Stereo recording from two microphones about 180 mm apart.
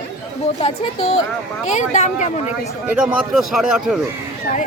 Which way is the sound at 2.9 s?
5° right (ahead or behind).